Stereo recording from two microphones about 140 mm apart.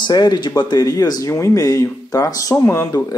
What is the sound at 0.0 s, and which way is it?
Speech, 30° left (ahead or behind).